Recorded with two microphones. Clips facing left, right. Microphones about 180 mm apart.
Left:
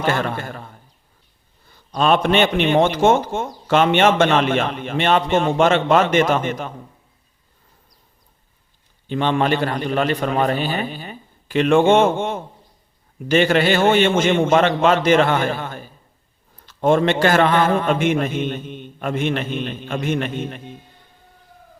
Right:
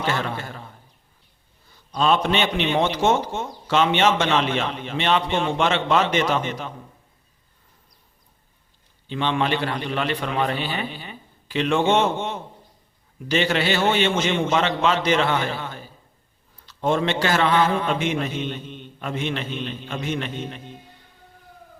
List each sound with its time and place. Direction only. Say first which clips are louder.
0.0 s speech: left 4 dB; 50° left (ahead or behind)
2.0 s speech: left 4 dB; 55° left (ahead or behind)
9.0 s speech: left 4 dB; 45° left (ahead or behind)